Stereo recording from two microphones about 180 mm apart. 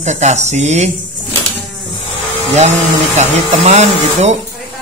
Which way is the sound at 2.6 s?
40° right (ahead or behind).